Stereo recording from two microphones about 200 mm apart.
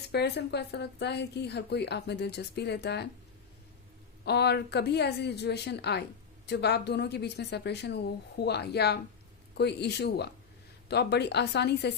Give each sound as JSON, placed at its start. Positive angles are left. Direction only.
{"t": 0.1, "sound": "a woman's voice", "side_deg": 55}
{"t": 4.3, "sound": "a woman's voice", "side_deg": 55}